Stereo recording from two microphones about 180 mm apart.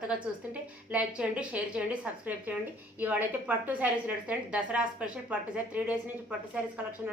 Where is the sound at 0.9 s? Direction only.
5° right (ahead or behind).